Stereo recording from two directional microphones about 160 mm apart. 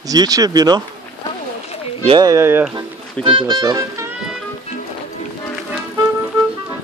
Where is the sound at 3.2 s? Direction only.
30° right (ahead or behind).